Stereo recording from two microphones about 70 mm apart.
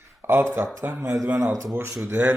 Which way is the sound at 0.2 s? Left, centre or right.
Right.